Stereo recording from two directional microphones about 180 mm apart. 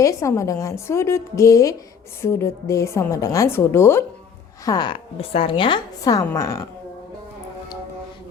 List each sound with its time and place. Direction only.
0.0 s a woman's voice: 15° left (ahead or behind)